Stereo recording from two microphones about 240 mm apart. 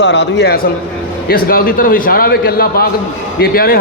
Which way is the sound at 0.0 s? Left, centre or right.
Left.